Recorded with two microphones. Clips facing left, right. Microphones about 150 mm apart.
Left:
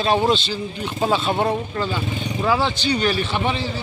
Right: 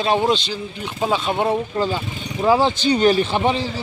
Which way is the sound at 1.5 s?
35° right (ahead or behind).